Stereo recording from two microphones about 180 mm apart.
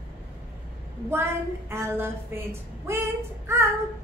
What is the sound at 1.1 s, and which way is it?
A woman's voice, 15° right (ahead or behind).